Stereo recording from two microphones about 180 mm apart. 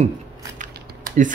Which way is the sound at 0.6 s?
45° right (ahead or behind).